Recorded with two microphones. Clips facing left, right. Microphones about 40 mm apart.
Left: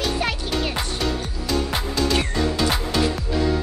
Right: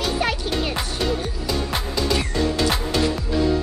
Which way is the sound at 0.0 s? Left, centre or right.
Centre.